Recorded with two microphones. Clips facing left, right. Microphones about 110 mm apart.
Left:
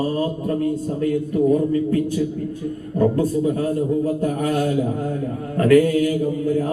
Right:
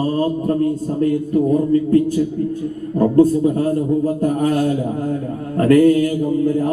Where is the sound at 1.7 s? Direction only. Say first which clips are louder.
Right 5 dB; 35° right (ahead or behind).